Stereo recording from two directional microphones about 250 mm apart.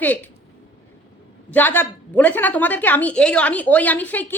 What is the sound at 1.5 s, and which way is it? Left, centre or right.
A woman's voice, centre.